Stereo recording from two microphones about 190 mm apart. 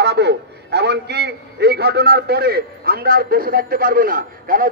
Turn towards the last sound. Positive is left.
turn(degrees=-45)  # may be behind; listen again after turning